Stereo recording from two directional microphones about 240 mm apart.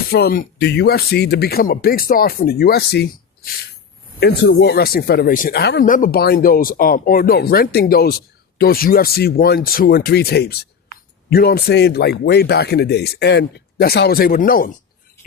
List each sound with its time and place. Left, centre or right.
0.1 s a man's voice: left